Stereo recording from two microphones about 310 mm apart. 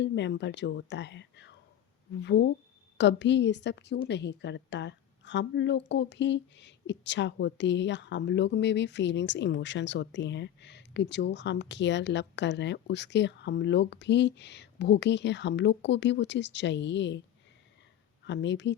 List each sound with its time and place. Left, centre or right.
0.0 s a woman's voice: left
18.3 s a woman's voice: left